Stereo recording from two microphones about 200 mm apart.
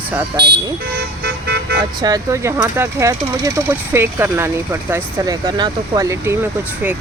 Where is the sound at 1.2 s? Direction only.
55° right (ahead or behind).